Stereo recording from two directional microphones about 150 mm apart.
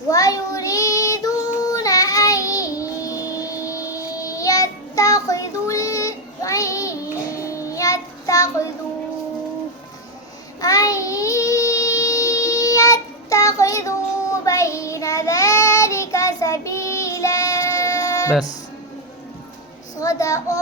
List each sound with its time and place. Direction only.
0.1 s child singing: 25° left (ahead or behind)
10.6 s child singing: 25° left (ahead or behind)
20.0 s child singing: 20° left (ahead or behind)